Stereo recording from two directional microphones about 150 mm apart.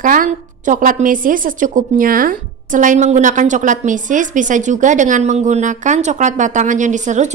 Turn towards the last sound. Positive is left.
turn(degrees=-55)  # may be behind; listen again after turning